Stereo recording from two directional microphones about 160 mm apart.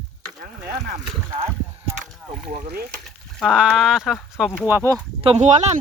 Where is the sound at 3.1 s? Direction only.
Centre (ahead or behind).